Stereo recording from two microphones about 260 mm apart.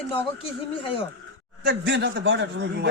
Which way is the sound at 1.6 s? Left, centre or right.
Right.